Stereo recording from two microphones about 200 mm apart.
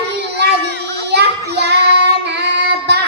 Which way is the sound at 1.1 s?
55° right (ahead or behind).